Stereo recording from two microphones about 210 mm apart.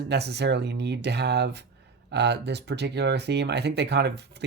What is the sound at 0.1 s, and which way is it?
Speech, 50° right (ahead or behind).